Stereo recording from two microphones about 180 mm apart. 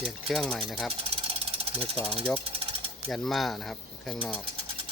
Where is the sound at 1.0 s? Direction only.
30° right (ahead or behind).